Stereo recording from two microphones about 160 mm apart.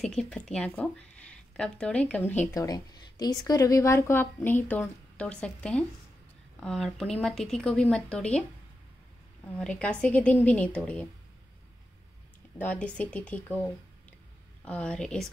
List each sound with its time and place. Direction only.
0.0 s speech: 5° left (ahead or behind)
2.5 s a woman's voice: 20° left (ahead or behind)
12.5 s a woman's voice: 10° left (ahead or behind)
14.6 s speech: 5° left (ahead or behind)